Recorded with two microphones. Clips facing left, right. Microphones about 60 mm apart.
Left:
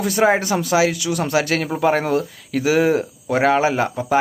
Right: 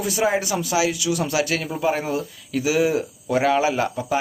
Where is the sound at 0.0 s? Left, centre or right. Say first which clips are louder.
Left 5 dB; left.